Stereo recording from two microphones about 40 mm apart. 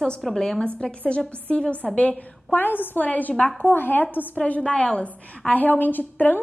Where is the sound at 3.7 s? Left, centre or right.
Left.